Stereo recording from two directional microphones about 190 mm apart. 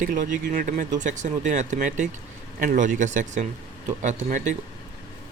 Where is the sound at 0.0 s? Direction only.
45° right (ahead or behind).